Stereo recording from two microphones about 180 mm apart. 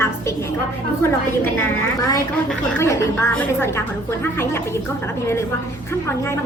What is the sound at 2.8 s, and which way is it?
Speech, 15° left (ahead or behind).